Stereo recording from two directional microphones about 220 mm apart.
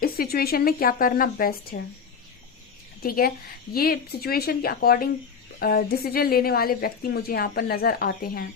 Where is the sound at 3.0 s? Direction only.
40° left (ahead or behind).